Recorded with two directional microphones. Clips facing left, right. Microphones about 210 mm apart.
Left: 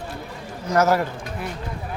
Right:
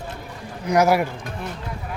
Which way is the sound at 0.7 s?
10° right (ahead or behind).